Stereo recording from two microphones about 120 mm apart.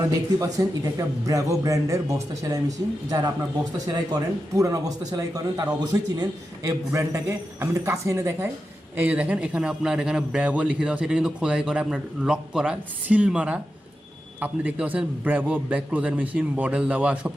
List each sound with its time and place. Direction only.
0.1 s speech: 30° right (ahead or behind)
9.0 s a man's voice: 10° right (ahead or behind)